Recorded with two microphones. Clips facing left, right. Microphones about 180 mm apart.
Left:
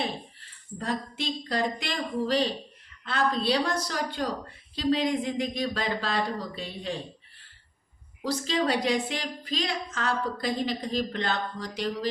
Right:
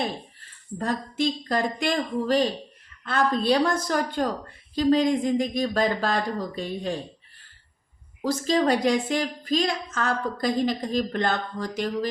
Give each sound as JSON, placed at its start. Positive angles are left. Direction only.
{"t": 0.8, "sound": "a woman's voice", "side_deg": -45}
{"t": 8.2, "sound": "a woman's voice", "side_deg": -45}